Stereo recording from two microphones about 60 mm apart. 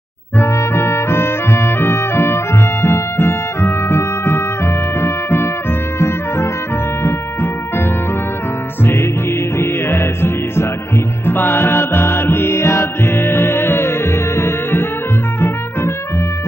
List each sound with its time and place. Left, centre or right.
0.4 s music: left
5.9 s trumpet: left
9.6 s music: left